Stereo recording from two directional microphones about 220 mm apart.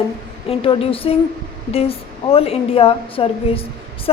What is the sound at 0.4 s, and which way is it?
Speech, 25° left (ahead or behind).